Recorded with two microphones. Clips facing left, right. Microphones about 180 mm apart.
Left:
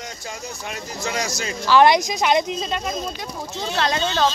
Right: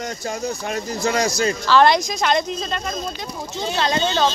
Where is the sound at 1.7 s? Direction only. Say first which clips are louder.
Left 2 dB; 10° left (ahead or behind).